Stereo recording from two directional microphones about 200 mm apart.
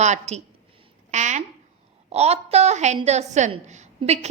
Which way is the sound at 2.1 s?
30° right (ahead or behind).